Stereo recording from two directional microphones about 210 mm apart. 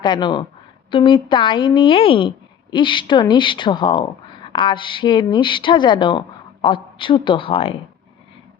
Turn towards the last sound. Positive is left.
turn(degrees=25)  # may be behind; listen again after turning